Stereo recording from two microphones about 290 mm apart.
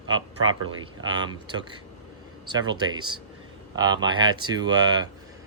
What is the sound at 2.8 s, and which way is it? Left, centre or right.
Speech, centre.